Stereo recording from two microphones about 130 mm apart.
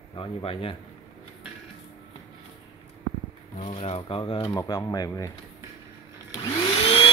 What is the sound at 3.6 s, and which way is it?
Speech, 55° left (ahead or behind).